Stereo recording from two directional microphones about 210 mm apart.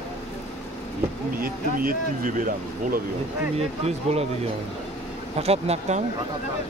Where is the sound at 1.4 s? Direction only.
40° right (ahead or behind).